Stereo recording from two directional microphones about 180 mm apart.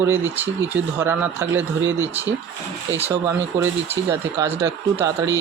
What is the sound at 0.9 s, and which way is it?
Speech, 15° right (ahead or behind).